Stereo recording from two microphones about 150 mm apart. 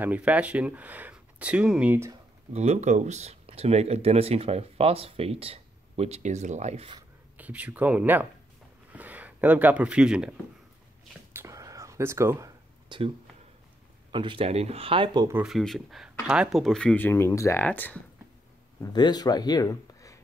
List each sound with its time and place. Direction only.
0.0 s speech: 10° right (ahead or behind)
2.5 s speech: 45° right (ahead or behind)
7.3 s speech: 10° right (ahead or behind)
11.3 s a sound: 20° right (ahead or behind)
12.8 s a sound: 35° right (ahead or behind)
14.1 s speech: 35° right (ahead or behind)
15.4 s speech: centre (ahead or behind)
18.8 s speech: 25° left (ahead or behind)